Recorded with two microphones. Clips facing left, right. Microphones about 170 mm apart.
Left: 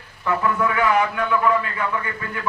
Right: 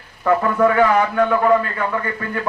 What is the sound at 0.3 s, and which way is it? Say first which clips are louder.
A man's voice: right 6 dB; 45° right (ahead or behind).